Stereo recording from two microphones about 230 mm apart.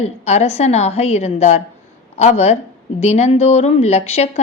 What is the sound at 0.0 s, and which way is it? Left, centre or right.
Speech, left.